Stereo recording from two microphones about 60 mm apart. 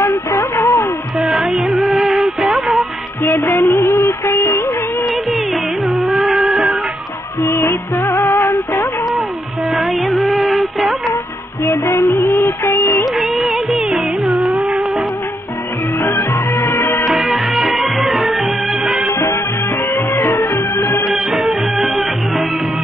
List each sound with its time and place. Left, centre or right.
0.0 s music: left
1.3 s music: centre
3.3 s music of bollywood: left
5.0 s music: centre
7.4 s music: left
9.7 s music: centre
11.6 s music: left
13.0 s music of bollywood: centre
14.5 s music: right
16.0 s music: left
17.1 s music: centre
19.1 s music: left
19.9 s music: left
21.7 s music: centre